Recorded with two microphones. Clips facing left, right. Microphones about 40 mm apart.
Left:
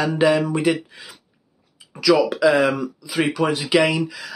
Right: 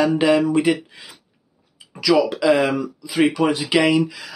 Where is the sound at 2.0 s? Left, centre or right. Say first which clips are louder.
Left 1 dB; centre.